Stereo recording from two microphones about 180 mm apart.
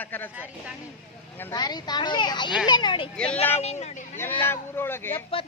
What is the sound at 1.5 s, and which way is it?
A child's voice, 25° left (ahead or behind).